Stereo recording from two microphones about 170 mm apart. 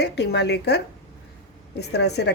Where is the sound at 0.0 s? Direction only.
80° left.